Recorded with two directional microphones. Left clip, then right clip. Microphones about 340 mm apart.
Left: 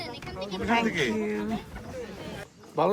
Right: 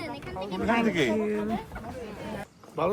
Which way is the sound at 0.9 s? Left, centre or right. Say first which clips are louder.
Right 1 dB; right.